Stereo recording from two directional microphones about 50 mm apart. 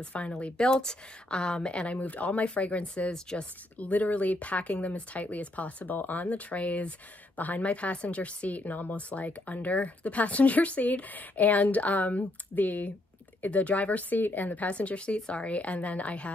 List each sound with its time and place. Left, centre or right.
0.0 s speech: left
3.1 s speech: centre
3.7 s speech: left